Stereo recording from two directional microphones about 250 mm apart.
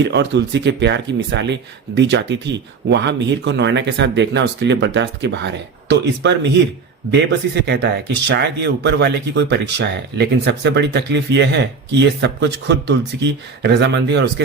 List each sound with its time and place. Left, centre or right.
0.0 s speech: right